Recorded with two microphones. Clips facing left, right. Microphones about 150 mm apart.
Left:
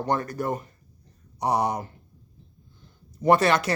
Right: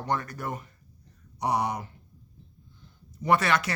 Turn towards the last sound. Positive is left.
turn(degrees=35)  # may be behind; listen again after turning